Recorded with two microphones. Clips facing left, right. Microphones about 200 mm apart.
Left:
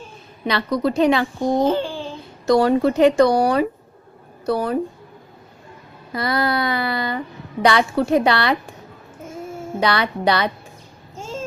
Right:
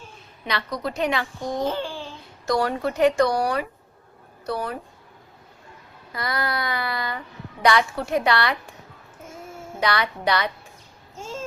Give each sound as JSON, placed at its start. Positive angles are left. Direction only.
{"t": 0.4, "sound": "a woman's voice", "side_deg": 30}
{"t": 6.1, "sound": "speech", "side_deg": 30}
{"t": 9.8, "sound": "speech", "side_deg": 30}